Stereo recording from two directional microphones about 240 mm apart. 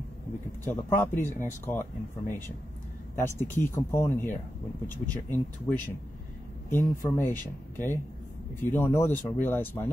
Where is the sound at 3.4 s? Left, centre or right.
Centre.